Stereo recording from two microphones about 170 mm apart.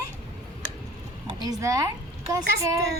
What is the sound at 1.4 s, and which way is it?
Speech, 20° right (ahead or behind).